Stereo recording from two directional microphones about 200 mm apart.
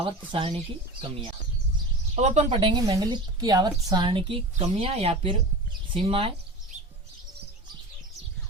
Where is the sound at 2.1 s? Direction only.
35° right (ahead or behind).